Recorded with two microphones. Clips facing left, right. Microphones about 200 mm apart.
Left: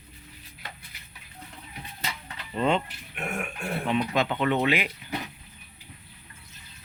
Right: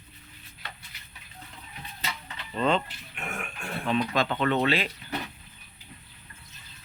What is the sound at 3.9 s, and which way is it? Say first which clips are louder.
Speech: even; 15° left (ahead or behind).